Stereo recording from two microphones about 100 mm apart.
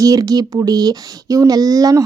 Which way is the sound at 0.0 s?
40° right (ahead or behind).